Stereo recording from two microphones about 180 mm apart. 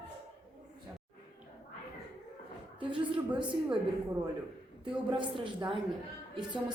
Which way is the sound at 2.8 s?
25° right (ahead or behind).